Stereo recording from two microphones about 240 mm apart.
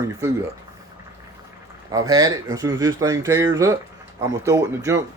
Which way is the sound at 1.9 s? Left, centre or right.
Centre.